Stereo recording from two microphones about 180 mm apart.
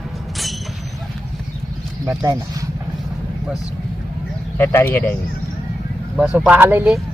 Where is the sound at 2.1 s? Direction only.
20° right (ahead or behind).